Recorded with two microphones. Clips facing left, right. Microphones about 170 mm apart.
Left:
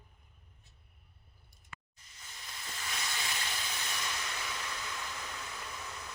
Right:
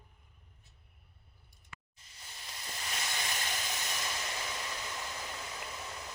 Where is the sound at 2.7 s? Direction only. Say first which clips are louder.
Right 1 dB; 20° right (ahead or behind).